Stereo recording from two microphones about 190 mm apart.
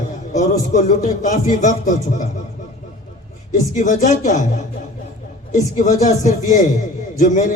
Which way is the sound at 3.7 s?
40° left (ahead or behind).